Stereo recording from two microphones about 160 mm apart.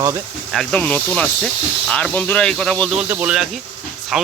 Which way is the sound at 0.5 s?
5° left (ahead or behind).